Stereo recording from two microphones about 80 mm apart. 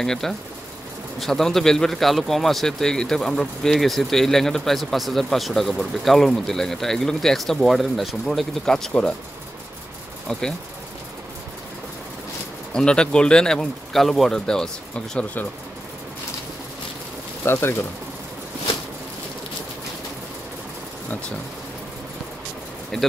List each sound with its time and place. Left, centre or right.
0.0 s speech: centre
12.7 s speech: centre
17.5 s speech: left
22.9 s speech: centre